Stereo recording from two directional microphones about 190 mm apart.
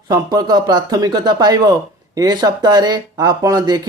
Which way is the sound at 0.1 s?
20° right (ahead or behind).